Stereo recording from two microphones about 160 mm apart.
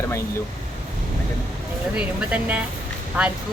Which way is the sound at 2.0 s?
5° right (ahead or behind).